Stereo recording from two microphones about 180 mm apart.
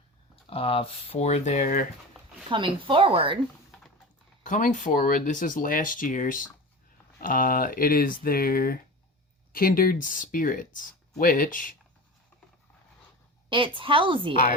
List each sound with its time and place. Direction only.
0.5 s speech: 30° left (ahead or behind); by 1.9 s 50° left (ahead or behind)
2.5 s a woman's voice: 30° right (ahead or behind)
4.4 s speech: 45° left (ahead or behind)
13.5 s a woman's voice: 30° right (ahead or behind)